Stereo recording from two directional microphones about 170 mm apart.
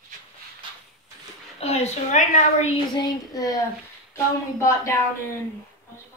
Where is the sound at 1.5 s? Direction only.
40° left (ahead or behind).